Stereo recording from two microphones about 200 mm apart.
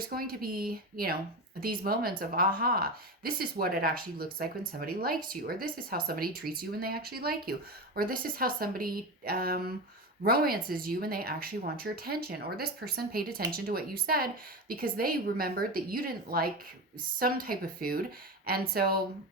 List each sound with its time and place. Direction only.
0.1 s speech: 50° right (ahead or behind)